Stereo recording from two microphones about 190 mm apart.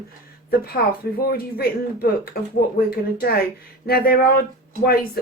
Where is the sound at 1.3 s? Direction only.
50° left (ahead or behind).